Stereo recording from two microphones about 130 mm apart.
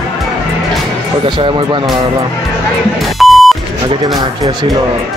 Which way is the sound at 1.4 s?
40° right (ahead or behind).